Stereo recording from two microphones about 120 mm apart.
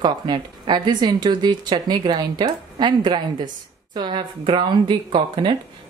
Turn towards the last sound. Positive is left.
turn(degrees=-40)  # may be behind; listen again after turning